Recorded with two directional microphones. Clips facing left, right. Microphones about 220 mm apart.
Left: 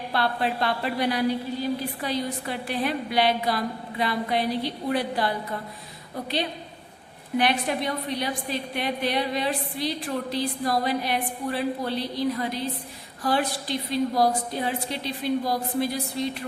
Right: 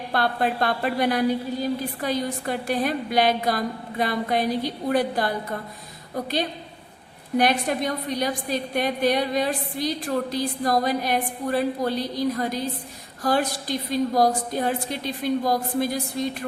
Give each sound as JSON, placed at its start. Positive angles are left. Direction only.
{"t": 0.1, "sound": "a woman's voice", "side_deg": -50}
{"t": 7.3, "sound": "a woman's voice", "side_deg": -45}